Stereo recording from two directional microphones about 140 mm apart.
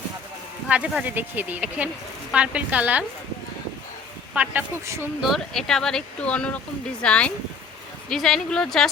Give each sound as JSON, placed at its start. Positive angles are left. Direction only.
{"t": 0.7, "sound": "speech", "side_deg": -10}
{"t": 4.4, "sound": "speech", "side_deg": -15}
{"t": 5.2, "sound": "speech", "side_deg": 0}